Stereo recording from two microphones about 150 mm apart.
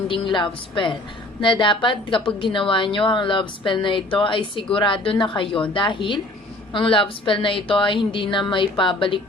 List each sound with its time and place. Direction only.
0.1 s a woman's voice: 35° left (ahead or behind)